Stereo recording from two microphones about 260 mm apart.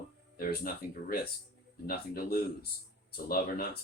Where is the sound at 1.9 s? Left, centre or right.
Left.